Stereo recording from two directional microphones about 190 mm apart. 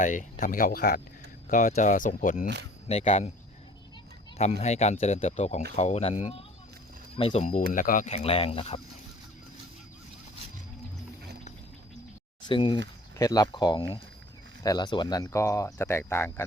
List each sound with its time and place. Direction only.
0.0 s speech: 40° left (ahead or behind)
4.6 s speech: 35° left (ahead or behind)
7.4 s speech: 45° left (ahead or behind); by 8.8 s 30° left (ahead or behind)
12.5 s speech: 25° left (ahead or behind)